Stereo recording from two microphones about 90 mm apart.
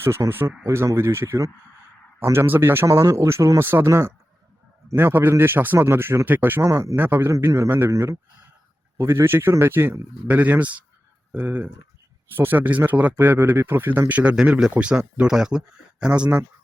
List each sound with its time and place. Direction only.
0.0 s speech: 30° right (ahead or behind)
6.6 s speech: 35° right (ahead or behind)
7.3 s a man's voice: 35° right (ahead or behind); by 16.5 s 15° right (ahead or behind)